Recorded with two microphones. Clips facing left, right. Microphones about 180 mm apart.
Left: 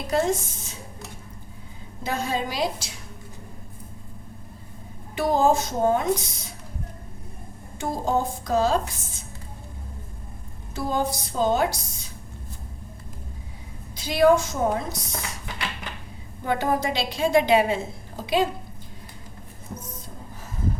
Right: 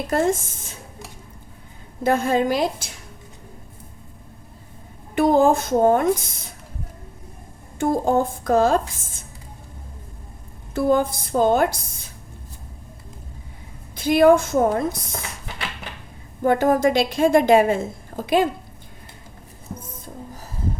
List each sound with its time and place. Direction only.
0.1 s a woman's voice: 50° right (ahead or behind)
2.0 s a woman's voice: 55° right (ahead or behind)
5.1 s a woman's voice: 55° right (ahead or behind)
7.8 s a woman's voice: 55° right (ahead or behind)
10.8 s a woman's voice: 55° right (ahead or behind)
13.9 s a woman's voice: 55° right (ahead or behind)
16.4 s a woman's voice: 50° right (ahead or behind)